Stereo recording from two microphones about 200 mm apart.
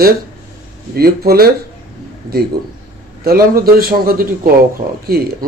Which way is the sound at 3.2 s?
50° right (ahead or behind).